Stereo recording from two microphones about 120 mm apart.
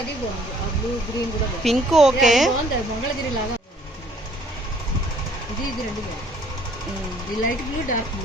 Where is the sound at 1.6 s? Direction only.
Centre (ahead or behind).